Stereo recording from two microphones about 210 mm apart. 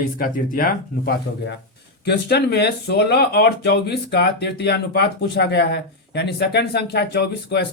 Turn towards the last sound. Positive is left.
turn(degrees=50)  # may be behind; listen again after turning